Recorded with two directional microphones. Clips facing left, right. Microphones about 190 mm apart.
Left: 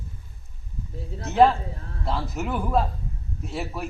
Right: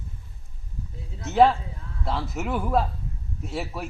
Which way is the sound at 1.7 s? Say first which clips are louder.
Left 2 dB; 45° left (ahead or behind).